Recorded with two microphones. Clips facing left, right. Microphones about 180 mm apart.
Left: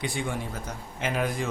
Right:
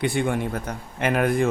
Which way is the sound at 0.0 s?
60° right (ahead or behind).